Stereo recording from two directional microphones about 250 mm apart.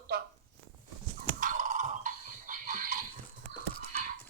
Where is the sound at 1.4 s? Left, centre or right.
Right.